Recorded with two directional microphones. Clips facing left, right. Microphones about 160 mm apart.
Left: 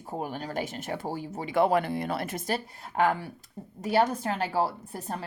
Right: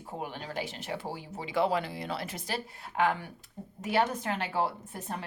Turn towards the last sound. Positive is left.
turn(degrees=35)  # may be behind; listen again after turning